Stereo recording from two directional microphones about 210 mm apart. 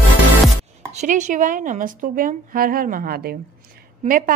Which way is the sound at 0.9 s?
35° right (ahead or behind).